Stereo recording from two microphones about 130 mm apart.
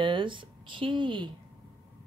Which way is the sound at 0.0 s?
40° right (ahead or behind).